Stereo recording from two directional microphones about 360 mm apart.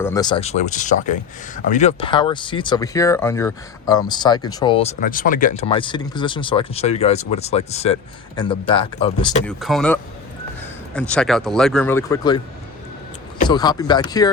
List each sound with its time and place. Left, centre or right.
0.0 s speech: centre
9.5 s speech: centre
13.4 s speech: centre